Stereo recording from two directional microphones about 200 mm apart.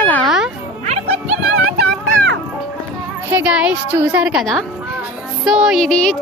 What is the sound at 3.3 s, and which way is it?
A woman's voice, 5° right (ahead or behind).